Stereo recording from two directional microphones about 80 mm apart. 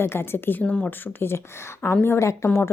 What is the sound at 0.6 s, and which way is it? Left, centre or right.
Speech, centre.